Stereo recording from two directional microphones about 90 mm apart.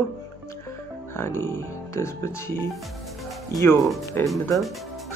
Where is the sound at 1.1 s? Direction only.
30° left (ahead or behind).